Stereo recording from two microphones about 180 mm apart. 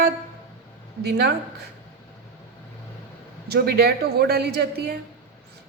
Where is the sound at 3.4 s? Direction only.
60° right (ahead or behind).